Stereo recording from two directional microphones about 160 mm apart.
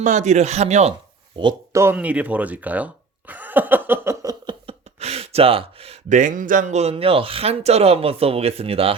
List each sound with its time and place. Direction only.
0.0 s speech: 50° right (ahead or behind)
1.7 s speech: 15° right (ahead or behind)
4.6 s speech: 40° right (ahead or behind)